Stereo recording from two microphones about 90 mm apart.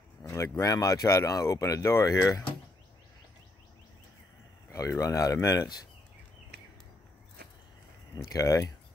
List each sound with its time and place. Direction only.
0.3 s speech: 35° left (ahead or behind)
4.7 s speech: 35° left (ahead or behind)
8.3 s speech: 40° left (ahead or behind)